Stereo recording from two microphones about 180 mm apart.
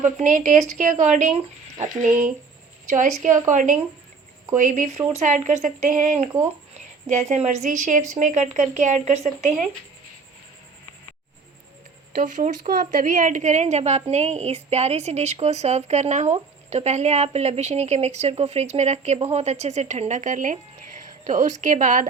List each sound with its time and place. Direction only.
0.0 s speech: 45° right (ahead or behind)
2.0 s speech: 5° right (ahead or behind)
3.5 s a woman's voice: 45° right (ahead or behind)
12.1 s a woman's voice: 50° right (ahead or behind)